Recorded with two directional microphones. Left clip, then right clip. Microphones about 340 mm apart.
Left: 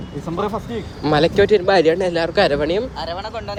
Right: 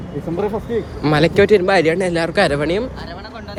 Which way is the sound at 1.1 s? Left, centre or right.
Centre.